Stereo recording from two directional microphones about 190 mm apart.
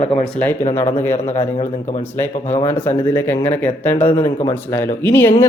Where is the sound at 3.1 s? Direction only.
10° left (ahead or behind).